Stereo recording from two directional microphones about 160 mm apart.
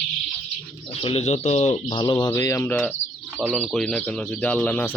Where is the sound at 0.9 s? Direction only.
40° left (ahead or behind).